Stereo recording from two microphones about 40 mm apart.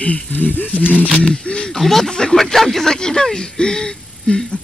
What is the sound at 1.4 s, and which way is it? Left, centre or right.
Speech, left.